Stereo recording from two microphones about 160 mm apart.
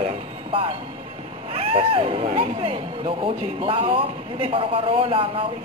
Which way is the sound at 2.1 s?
35° right (ahead or behind).